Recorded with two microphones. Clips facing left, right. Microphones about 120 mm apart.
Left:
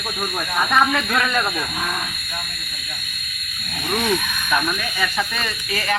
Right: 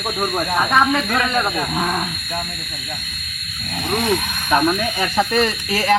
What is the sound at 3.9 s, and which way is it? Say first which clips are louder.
Speech: right 2 dB; 35° right (ahead or behind).